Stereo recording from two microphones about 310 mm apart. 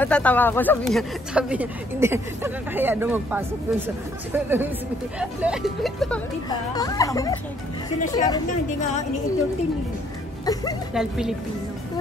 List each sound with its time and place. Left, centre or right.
0.0 s a child's voice: centre
10.4 s a child's voice: centre
11.0 s speech: centre